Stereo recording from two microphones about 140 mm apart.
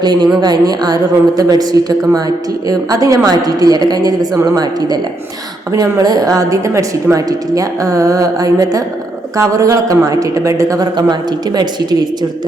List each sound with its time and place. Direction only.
0.0 s a woman's voice: 30° right (ahead or behind)